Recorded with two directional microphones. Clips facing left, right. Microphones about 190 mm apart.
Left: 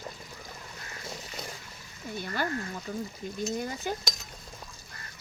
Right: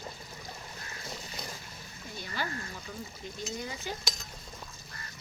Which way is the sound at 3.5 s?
50° left (ahead or behind).